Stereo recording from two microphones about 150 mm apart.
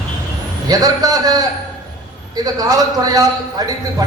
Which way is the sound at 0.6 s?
25° right (ahead or behind).